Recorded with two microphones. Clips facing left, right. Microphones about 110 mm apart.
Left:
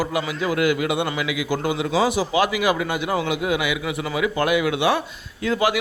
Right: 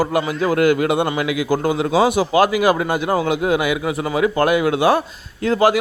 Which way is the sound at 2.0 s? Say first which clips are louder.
Right 5 dB; 55° right (ahead or behind).